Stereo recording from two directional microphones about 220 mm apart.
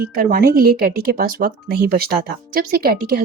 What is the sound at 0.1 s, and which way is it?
A woman's voice, 40° right (ahead or behind).